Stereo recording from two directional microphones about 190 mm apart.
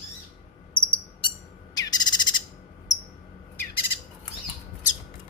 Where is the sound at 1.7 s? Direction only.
20° left (ahead or behind).